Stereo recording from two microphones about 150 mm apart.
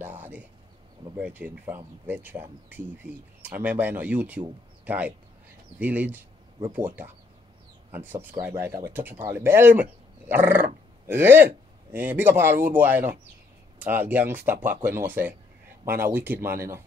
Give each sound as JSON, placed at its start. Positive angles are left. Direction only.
{"t": 0.0, "sound": "a sound", "side_deg": -10}
{"t": 1.1, "sound": "speech", "side_deg": -10}
{"t": 7.9, "sound": "a man's voice", "side_deg": -10}